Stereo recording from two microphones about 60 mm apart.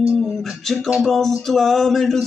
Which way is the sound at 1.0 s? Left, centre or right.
Centre.